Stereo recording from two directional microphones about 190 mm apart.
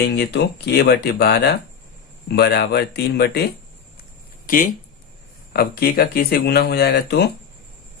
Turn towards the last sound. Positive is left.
turn(degrees=60)  # may be behind; listen again after turning